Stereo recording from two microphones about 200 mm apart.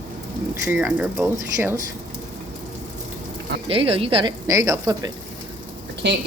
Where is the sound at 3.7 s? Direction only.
30° right (ahead or behind).